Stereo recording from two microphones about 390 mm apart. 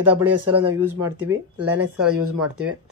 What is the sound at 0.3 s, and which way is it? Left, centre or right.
Speech, right.